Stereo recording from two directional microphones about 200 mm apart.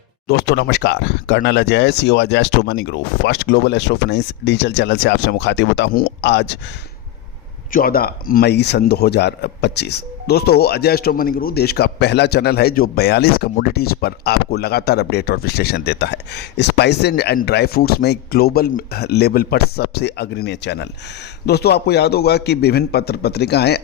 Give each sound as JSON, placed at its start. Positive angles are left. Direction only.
{"t": 0.3, "sound": "speech", "side_deg": 55}
{"t": 7.7, "sound": "speech", "side_deg": 45}